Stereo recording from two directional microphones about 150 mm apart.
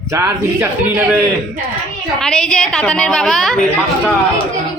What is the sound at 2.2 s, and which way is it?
A woman's voice, 5° left (ahead or behind).